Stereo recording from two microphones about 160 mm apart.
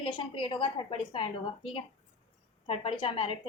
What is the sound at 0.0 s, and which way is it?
A woman's voice, 30° left (ahead or behind).